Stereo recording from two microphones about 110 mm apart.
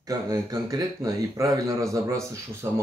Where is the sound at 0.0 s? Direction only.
30° right (ahead or behind).